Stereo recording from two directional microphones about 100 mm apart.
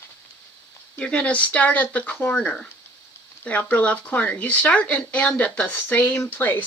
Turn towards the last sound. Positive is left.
turn(degrees=20)  # may be behind; listen again after turning